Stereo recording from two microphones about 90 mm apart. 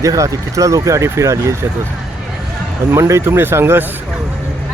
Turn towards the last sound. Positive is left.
turn(degrees=-25)  # may be behind; listen again after turning